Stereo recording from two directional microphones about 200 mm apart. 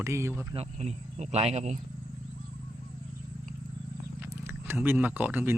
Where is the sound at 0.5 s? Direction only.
30° right (ahead or behind).